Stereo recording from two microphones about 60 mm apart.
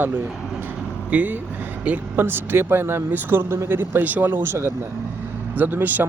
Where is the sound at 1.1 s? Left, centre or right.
Right.